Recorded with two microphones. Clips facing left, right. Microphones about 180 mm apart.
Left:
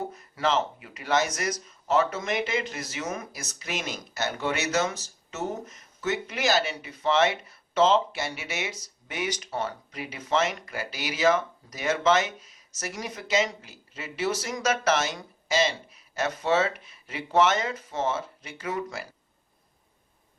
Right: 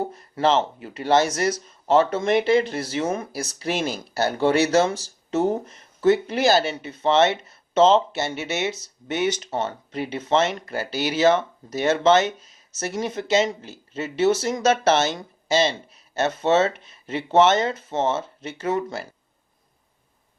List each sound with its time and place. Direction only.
0.0 s speech: 30° right (ahead or behind)